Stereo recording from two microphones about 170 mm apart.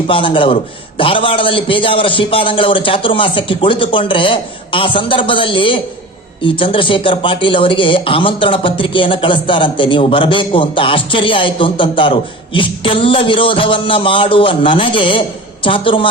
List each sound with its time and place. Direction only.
0.1 s a man's voice: 30° left (ahead or behind)